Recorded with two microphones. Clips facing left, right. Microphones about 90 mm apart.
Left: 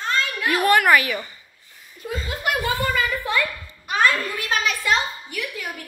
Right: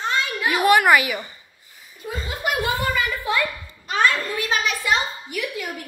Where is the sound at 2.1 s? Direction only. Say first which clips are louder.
Left 1 dB; 15° right (ahead or behind).